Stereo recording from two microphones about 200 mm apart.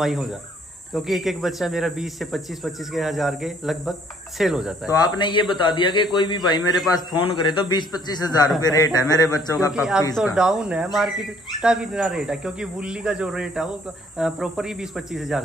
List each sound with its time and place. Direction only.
0.0 s speech: centre (ahead or behind)
5.1 s a man's voice: 25° left (ahead or behind)
9.7 s speech: 5° right (ahead or behind)